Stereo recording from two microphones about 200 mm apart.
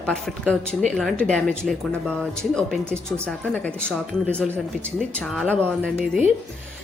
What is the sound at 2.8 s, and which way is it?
Speech, 10° right (ahead or behind).